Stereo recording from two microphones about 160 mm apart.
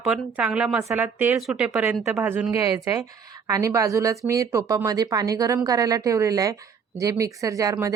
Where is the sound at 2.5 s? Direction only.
20° right (ahead or behind).